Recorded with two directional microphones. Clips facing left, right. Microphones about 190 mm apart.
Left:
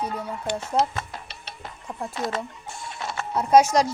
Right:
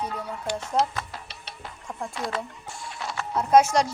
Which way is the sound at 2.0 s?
20° left (ahead or behind).